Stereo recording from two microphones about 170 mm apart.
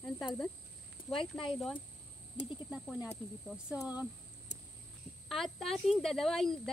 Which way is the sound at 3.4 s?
5° right (ahead or behind).